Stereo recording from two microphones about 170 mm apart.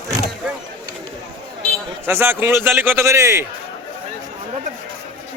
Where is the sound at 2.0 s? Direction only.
10° right (ahead or behind).